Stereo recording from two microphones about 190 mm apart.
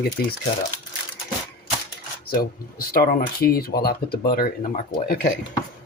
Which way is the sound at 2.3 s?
50° left (ahead or behind).